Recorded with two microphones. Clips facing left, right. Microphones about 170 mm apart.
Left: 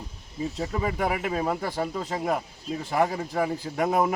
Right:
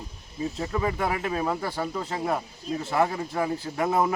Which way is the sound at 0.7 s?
15° left (ahead or behind).